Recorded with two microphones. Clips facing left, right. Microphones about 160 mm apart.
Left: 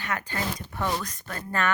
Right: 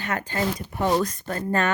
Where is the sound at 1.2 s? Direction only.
40° right (ahead or behind).